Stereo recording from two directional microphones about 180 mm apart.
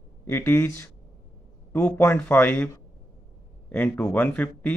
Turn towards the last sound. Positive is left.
turn(degrees=10)  # may be behind; listen again after turning